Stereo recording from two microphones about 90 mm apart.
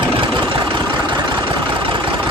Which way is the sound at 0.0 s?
65° right (ahead or behind).